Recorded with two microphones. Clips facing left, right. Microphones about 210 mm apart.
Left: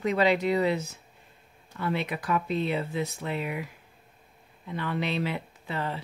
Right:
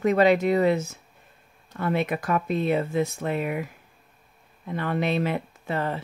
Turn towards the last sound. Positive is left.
turn(degrees=-50)  # may be behind; listen again after turning